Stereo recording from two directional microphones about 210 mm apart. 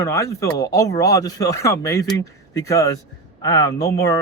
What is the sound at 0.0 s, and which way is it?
Speech, 15° left (ahead or behind).